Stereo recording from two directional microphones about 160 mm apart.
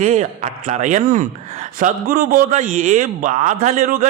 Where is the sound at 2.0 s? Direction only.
60° right (ahead or behind).